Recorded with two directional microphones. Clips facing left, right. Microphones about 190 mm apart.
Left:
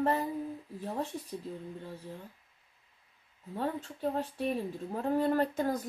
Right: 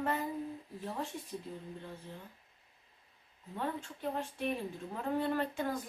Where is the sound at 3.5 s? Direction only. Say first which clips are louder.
Left 4 dB; 35° left (ahead or behind).